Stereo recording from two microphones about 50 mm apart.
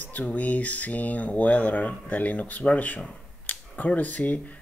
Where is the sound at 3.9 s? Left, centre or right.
Left.